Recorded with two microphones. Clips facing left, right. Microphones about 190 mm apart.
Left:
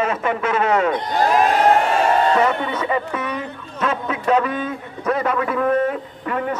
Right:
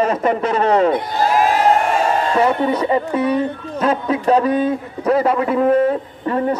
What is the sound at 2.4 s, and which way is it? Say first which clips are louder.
Speech: right 4 dB; 35° right (ahead or behind).